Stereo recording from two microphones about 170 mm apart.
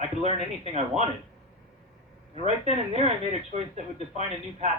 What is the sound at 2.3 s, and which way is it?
Speech, 40° right (ahead or behind).